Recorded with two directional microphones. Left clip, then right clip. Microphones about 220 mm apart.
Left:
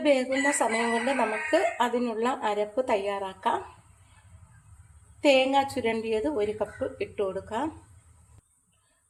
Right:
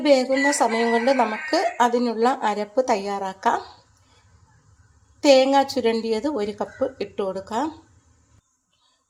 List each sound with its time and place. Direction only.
0.0 s speech: 30° right (ahead or behind)
5.2 s speech: 30° right (ahead or behind)